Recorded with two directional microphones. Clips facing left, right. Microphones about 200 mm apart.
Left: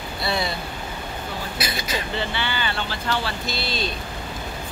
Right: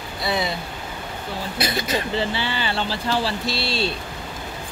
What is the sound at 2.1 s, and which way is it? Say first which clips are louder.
Speech: right 3 dB; 30° right (ahead or behind).